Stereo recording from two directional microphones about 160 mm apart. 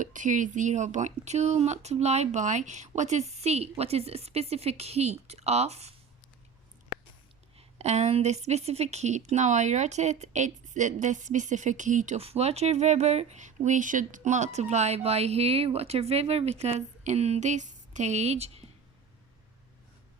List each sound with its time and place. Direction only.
0.0 s a woman's voice: 55° right (ahead or behind)
7.8 s a woman's voice: 45° right (ahead or behind)